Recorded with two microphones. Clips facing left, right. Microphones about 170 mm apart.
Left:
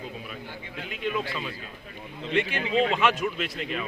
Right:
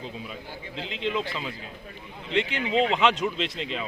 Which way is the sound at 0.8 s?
25° right (ahead or behind).